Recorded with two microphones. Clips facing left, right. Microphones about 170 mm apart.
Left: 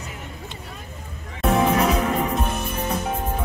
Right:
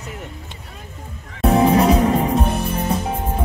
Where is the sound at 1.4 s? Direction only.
35° right (ahead or behind).